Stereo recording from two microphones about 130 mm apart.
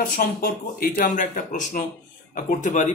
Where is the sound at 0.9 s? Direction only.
80° left.